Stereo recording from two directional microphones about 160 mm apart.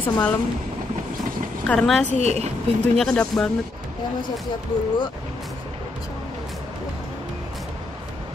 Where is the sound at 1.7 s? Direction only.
5° left (ahead or behind).